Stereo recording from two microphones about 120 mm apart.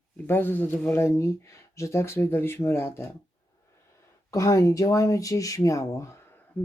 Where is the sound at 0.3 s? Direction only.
15° left (ahead or behind).